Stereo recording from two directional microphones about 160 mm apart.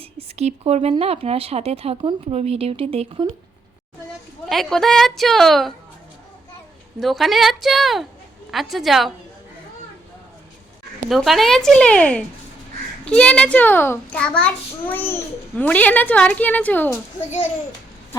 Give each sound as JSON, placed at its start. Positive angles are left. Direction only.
{"t": 0.0, "sound": "speech", "side_deg": -40}
{"t": 4.4, "sound": "a woman's voice", "side_deg": 0}
{"t": 7.0, "sound": "a woman's voice", "side_deg": 0}
{"t": 11.1, "sound": "a woman's voice", "side_deg": 0}